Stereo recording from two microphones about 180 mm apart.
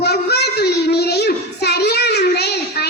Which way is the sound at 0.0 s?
65° left (ahead or behind).